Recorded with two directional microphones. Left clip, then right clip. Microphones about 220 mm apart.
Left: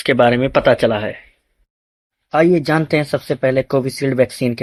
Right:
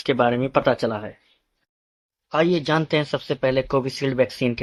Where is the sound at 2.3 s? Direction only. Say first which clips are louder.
Left 6 dB; 15° left (ahead or behind).